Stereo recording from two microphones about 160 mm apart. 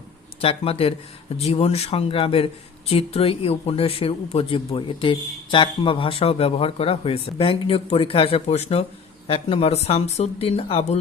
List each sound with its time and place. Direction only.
0.4 s speech: 35° left (ahead or behind)